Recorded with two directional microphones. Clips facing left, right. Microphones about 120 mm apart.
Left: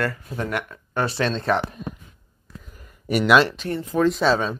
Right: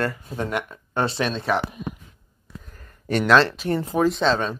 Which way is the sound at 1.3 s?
5° right (ahead or behind).